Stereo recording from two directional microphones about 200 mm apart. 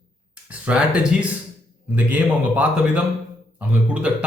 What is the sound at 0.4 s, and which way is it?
A man's voice, 5° right (ahead or behind).